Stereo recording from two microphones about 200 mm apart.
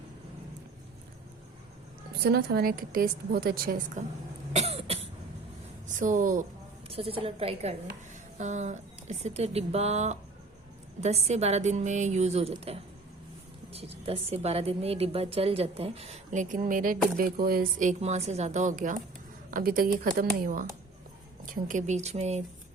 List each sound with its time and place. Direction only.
2.2 s a woman's voice: 50° right (ahead or behind)
4.5 s cough: 30° right (ahead or behind)
5.9 s a woman's voice: 40° right (ahead or behind)
6.8 s a woman's voice: 30° right (ahead or behind)